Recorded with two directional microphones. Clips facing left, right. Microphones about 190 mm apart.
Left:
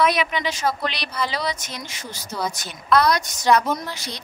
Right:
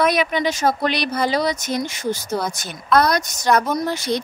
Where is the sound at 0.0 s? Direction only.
45° right (ahead or behind).